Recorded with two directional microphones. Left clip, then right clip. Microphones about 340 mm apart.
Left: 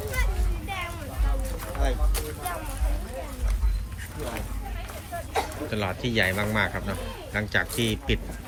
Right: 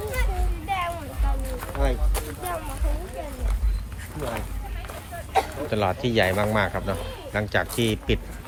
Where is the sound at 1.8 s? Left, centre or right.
Right.